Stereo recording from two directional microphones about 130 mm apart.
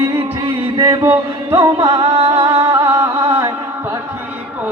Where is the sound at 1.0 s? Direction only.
15° right (ahead or behind).